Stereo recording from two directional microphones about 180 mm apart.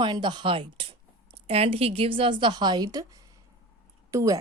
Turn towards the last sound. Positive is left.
turn(degrees=-20)  # may be behind; listen again after turning